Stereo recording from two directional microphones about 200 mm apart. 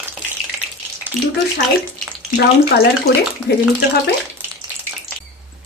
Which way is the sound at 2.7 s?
50° left (ahead or behind).